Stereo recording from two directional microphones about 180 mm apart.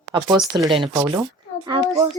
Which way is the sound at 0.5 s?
25° right (ahead or behind).